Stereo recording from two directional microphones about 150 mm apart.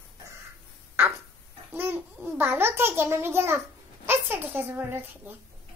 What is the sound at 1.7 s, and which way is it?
A child's voice, 15° right (ahead or behind).